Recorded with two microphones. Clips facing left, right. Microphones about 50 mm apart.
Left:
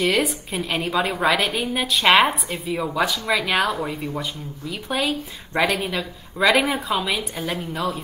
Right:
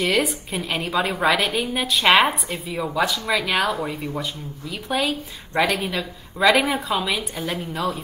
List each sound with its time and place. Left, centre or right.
0.0 s a woman's voice: centre